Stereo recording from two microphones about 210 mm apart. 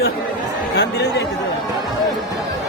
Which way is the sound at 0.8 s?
55° left (ahead or behind).